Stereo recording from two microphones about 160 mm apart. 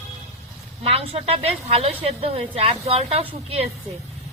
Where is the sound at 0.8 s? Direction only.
40° right (ahead or behind).